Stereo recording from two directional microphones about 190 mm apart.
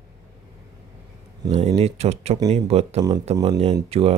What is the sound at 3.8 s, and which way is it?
Speech, 30° right (ahead or behind).